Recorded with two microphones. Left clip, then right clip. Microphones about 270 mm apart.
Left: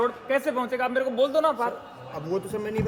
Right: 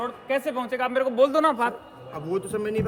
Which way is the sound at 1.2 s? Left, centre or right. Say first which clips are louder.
Right 3 dB; right.